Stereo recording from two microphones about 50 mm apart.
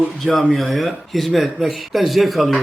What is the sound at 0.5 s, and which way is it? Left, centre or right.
A man's voice, centre.